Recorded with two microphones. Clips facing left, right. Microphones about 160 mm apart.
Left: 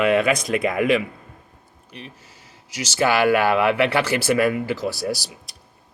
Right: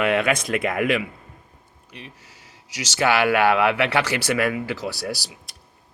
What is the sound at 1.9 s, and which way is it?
Speech, 35° left (ahead or behind).